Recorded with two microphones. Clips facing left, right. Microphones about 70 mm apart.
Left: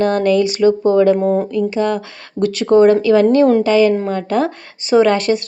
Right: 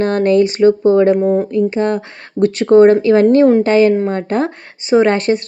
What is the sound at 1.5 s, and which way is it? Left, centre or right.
Speech, right.